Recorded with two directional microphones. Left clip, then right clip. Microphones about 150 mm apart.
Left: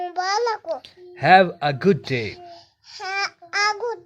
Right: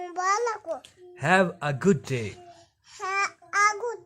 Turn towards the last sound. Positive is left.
turn(degrees=-5)  # may be behind; listen again after turning